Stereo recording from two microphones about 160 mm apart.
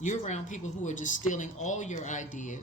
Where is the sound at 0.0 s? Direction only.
50° left (ahead or behind).